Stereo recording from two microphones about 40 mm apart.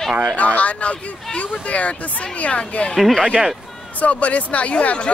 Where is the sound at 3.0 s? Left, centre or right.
Centre.